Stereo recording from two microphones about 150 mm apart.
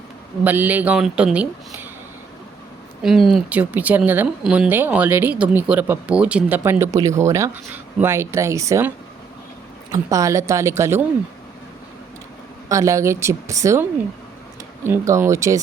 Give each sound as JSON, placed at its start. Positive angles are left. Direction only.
{"t": 0.4, "sound": "speech", "side_deg": -10}
{"t": 3.0, "sound": "speech", "side_deg": 0}
{"t": 9.9, "sound": "speech", "side_deg": -20}
{"t": 12.6, "sound": "speech", "side_deg": -20}
{"t": 14.8, "sound": "speech", "side_deg": -20}